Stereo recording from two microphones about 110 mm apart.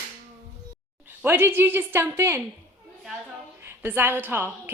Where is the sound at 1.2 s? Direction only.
20° right (ahead or behind).